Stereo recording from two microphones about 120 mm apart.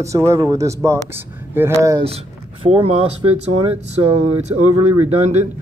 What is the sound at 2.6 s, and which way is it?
Speech, 50° right (ahead or behind).